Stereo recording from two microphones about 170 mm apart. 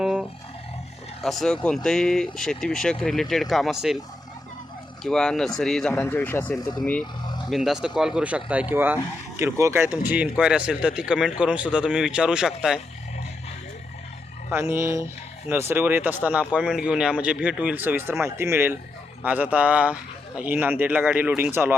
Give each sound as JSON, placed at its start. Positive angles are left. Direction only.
{"t": 0.0, "sound": "roar", "side_deg": -5}
{"t": 1.2, "sound": "speech", "side_deg": 0}
{"t": 5.0, "sound": "speech", "side_deg": 5}
{"t": 5.9, "sound": "speech", "side_deg": 15}
{"t": 7.5, "sound": "speech", "side_deg": 0}
{"t": 14.5, "sound": "speech", "side_deg": -15}